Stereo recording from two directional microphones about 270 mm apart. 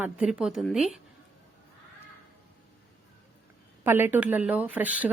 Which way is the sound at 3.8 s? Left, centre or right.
Centre.